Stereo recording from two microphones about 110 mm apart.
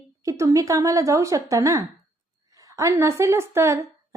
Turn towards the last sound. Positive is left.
turn(degrees=-25)  # may be behind; listen again after turning